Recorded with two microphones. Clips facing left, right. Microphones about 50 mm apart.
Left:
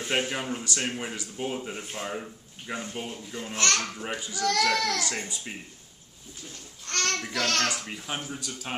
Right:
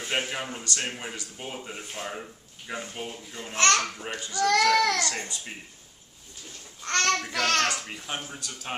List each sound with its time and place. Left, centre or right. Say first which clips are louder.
0.3 s speech: left 2 dB; centre
3.5 s speech: right 4 dB; right
4.0 s speech: left 1 dB; centre
4.4 s a child's voice: right 4 dB; right
5.0 s speech: right 1 dB; centre
6.9 s a child's voice: right 4 dB; right
7.8 s speech: left 1 dB; centre